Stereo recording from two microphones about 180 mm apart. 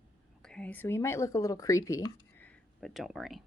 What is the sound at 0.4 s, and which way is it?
Speech, 5° left (ahead or behind).